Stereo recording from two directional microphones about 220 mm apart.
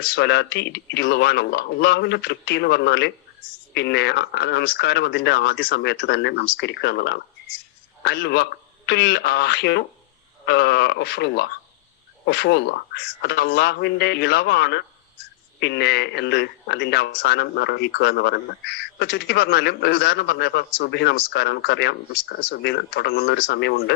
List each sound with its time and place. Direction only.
0.1 s speech: 50° left (ahead or behind)